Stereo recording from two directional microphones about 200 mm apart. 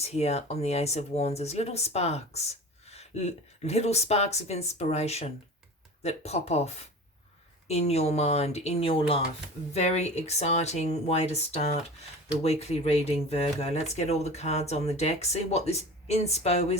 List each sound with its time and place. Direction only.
0.0 s speech: 30° left (ahead or behind)